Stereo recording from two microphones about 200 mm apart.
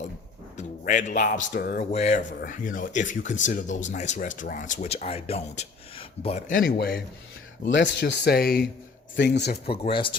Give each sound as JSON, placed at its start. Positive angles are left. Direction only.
{"t": 0.5, "sound": "speech", "side_deg": 35}
{"t": 1.8, "sound": "speech", "side_deg": 35}
{"t": 6.5, "sound": "speech", "side_deg": 50}
{"t": 7.7, "sound": "speech", "side_deg": 60}
{"t": 9.6, "sound": "speech", "side_deg": 25}